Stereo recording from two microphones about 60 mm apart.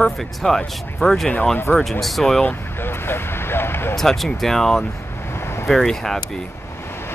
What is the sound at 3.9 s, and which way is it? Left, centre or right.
Speech, centre.